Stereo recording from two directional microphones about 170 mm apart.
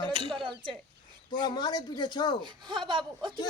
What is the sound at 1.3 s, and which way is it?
Speech, 25° left (ahead or behind).